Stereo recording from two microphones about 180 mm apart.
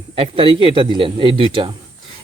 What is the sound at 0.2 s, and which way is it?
Speech, 30° right (ahead or behind).